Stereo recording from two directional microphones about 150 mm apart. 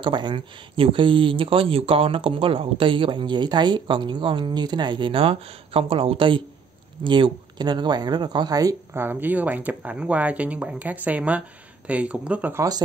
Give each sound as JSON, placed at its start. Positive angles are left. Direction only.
{"t": 0.0, "sound": "speech", "side_deg": -30}